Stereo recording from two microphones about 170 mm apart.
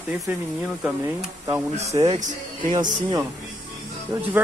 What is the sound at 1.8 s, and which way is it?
Speech, 20° right (ahead or behind).